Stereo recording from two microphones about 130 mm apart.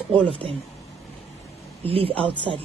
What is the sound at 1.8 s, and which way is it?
Speech, 45° right (ahead or behind).